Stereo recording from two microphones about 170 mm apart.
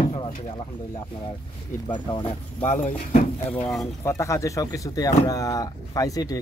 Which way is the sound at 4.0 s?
15° left (ahead or behind).